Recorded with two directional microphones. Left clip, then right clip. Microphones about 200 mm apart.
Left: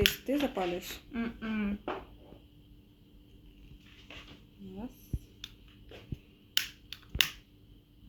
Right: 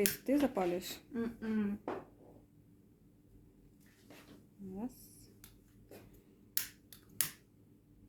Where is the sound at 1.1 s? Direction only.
30° left (ahead or behind).